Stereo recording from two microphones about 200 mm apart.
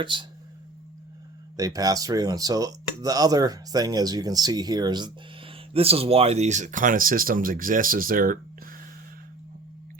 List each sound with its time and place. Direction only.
0.0 s speech: 25° right (ahead or behind)
1.5 s speech: 15° right (ahead or behind); by 8.8 s 45° right (ahead or behind)